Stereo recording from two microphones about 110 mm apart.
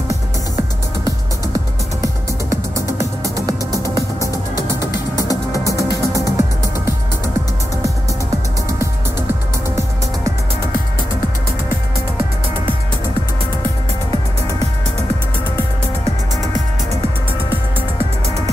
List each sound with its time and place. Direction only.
4.7 s music: 35° left (ahead or behind)